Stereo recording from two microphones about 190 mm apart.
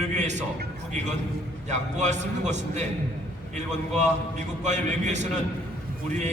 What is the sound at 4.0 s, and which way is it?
A man's voice, 40° right (ahead or behind).